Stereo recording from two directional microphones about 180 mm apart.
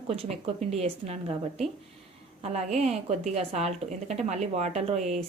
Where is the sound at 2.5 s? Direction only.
35° right (ahead or behind).